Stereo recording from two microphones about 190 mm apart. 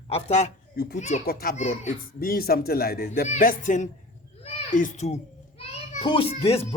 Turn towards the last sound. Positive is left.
turn(degrees=30)  # may be behind; listen again after turning